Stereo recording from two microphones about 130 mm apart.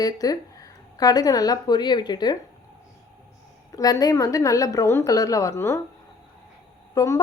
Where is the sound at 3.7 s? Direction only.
30° left (ahead or behind).